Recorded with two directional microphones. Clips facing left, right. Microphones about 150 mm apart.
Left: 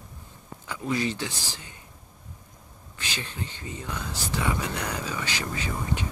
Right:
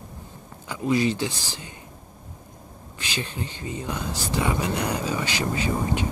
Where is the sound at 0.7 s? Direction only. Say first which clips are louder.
Right 5 dB; 20° right (ahead or behind).